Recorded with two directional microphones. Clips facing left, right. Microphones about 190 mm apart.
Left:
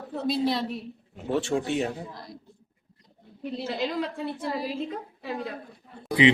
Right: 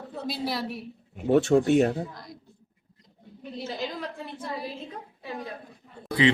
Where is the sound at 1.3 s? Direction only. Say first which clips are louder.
Right 6 dB; 50° right (ahead or behind).